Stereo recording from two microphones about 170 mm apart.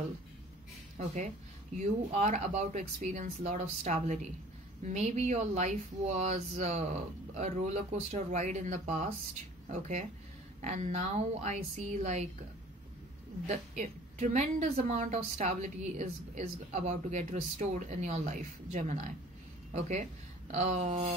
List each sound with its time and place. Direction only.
0.9 s a woman's voice: 45° right (ahead or behind)
13.5 s a woman's voice: 45° right (ahead or behind)